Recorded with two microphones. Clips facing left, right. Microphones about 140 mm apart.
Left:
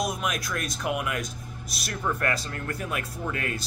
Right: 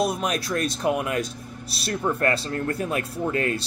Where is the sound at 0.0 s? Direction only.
30° right (ahead or behind).